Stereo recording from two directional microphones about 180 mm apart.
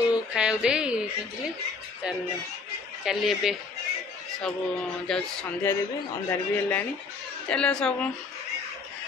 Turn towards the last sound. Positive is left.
turn(degrees=5)  # may be behind; listen again after turning